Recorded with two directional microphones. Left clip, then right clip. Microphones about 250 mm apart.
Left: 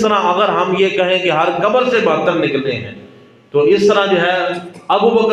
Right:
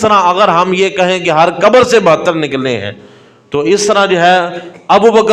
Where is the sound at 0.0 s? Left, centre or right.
Right.